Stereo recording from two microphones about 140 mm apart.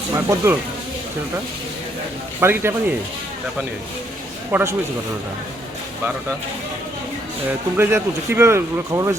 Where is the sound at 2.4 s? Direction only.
15° right (ahead or behind).